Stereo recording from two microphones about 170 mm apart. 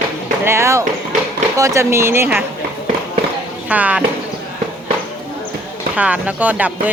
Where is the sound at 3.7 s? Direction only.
10° right (ahead or behind).